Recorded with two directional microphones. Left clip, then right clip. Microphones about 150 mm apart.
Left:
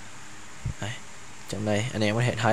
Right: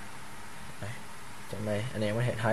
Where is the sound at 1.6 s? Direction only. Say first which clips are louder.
Left 6 dB; 65° left (ahead or behind).